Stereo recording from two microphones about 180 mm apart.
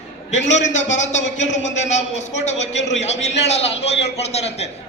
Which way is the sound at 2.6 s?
80° left.